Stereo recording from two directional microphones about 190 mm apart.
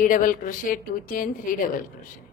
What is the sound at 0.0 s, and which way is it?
A woman's voice, 45° left (ahead or behind).